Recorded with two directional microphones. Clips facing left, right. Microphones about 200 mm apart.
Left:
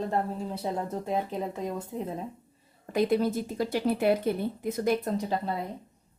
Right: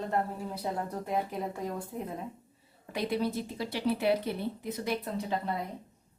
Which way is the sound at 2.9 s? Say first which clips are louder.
Left 6 dB; 45° left (ahead or behind).